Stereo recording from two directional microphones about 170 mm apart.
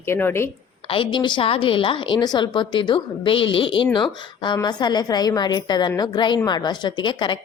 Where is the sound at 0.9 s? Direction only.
30° left (ahead or behind).